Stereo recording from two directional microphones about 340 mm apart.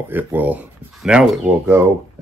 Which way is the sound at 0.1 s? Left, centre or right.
Centre.